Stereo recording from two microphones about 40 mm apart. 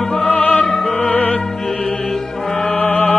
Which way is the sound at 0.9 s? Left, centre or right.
Left.